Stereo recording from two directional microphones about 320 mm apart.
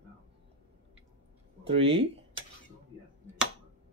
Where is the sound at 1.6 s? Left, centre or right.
Centre.